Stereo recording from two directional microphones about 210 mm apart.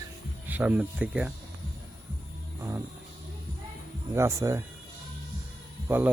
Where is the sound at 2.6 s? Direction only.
15° right (ahead or behind).